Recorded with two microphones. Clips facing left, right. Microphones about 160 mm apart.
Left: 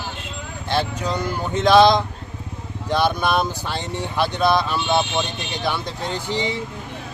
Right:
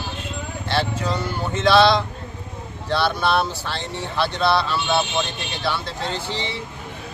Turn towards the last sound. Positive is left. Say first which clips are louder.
# left 3 dB
turn(degrees=15)  # may be behind; listen again after turning